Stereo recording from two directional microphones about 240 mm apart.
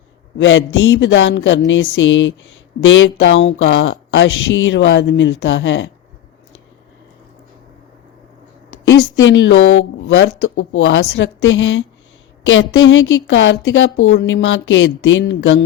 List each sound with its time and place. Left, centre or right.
0.3 s speech: left
8.8 s speech: left